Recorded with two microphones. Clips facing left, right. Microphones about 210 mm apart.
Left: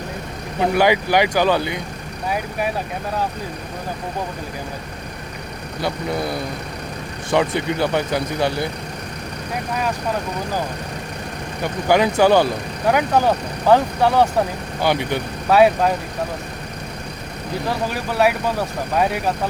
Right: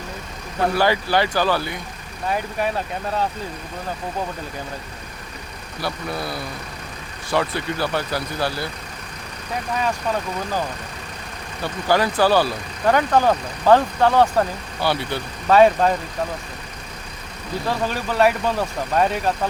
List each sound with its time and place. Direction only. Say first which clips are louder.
0.6 s speech: left 3 dB; 15° left (ahead or behind)
5.8 s speech: left 4 dB; 20° left (ahead or behind)
11.6 s speech: left 3 dB; 20° left (ahead or behind)
15.4 s speech: even; 5° left (ahead or behind)
17.8 s speech: right 1 dB; 5° left (ahead or behind)